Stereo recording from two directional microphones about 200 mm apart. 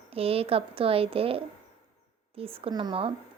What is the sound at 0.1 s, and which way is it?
A woman's voice, 30° right (ahead or behind).